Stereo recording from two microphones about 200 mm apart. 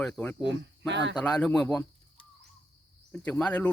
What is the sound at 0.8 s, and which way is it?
Speech, 60° right (ahead or behind).